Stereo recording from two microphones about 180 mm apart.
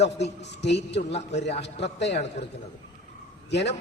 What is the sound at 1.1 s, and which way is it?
A man's voice, 35° left (ahead or behind).